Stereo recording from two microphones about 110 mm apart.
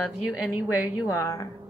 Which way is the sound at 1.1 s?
30° left (ahead or behind).